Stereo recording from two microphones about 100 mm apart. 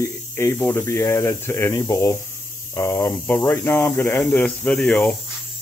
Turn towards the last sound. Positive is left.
turn(degrees=10)  # may be behind; listen again after turning